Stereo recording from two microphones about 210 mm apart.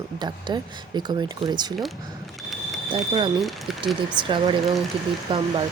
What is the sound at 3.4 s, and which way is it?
Speech, centre (ahead or behind).